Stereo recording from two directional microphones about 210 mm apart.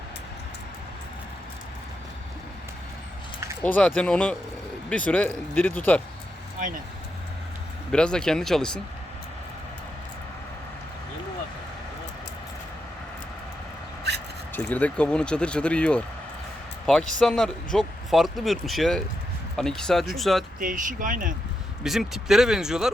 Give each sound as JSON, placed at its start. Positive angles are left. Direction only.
{"t": 3.8, "sound": "speech", "side_deg": 5}
{"t": 7.9, "sound": "speech", "side_deg": 5}
{"t": 14.5, "sound": "speech", "side_deg": 5}
{"t": 20.6, "sound": "speech", "side_deg": -40}
{"t": 21.8, "sound": "speech", "side_deg": 0}